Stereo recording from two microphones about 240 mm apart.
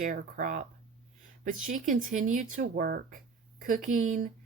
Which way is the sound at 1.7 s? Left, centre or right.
Right.